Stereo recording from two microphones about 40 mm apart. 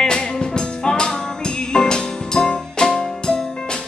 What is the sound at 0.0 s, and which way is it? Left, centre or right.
Music, centre.